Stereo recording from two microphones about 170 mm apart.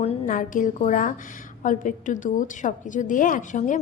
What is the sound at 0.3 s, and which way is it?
A woman's voice, 50° left (ahead or behind).